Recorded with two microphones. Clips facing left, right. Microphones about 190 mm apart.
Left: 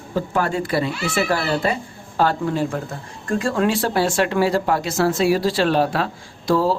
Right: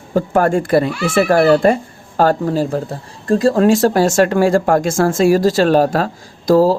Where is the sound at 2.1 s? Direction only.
40° right (ahead or behind).